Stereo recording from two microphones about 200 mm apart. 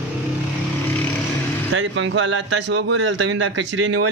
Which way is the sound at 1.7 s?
70° right (ahead or behind).